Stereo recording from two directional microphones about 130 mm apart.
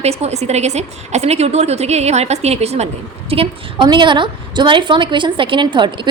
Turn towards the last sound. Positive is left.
turn(degrees=-35)  # may be behind; listen again after turning